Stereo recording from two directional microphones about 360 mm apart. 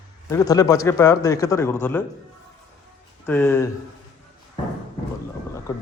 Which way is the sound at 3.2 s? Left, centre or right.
Centre.